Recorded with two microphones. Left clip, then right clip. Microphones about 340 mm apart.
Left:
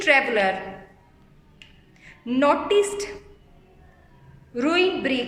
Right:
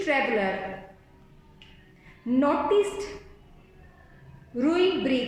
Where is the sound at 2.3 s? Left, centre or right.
Left.